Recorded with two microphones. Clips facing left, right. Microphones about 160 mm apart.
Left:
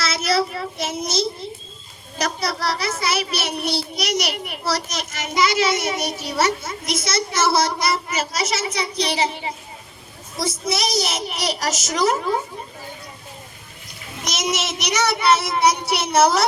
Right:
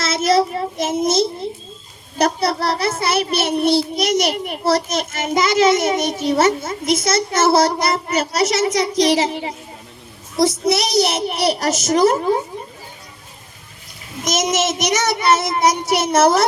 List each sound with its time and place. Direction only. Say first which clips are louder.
0.0 s child singing: right 5 dB; 45° right (ahead or behind)
1.0 s a child's voice: right 7 dB; 50° right (ahead or behind); by 9.5 s 90° right
10.3 s a child's voice: right 8 dB; 70° right (ahead or behind); by 12.1 s 55° right (ahead or behind)
14.3 s a child's voice: right 6 dB; 45° right (ahead or behind)